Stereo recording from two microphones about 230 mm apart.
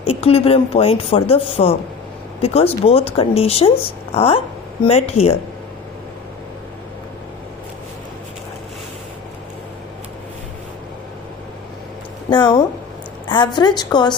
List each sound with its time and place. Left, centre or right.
0.0 s speech: left
12.3 s speech: centre